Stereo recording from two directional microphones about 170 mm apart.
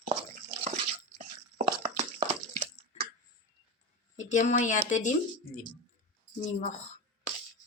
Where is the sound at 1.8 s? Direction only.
40° right (ahead or behind).